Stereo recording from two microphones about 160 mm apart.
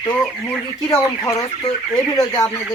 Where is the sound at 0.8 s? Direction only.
20° left (ahead or behind).